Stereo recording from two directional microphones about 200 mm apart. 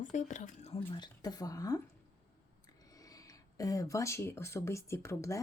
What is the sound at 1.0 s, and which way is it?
Speech, 20° left (ahead or behind).